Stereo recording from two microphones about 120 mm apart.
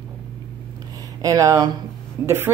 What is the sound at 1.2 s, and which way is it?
A woman's voice, 30° right (ahead or behind).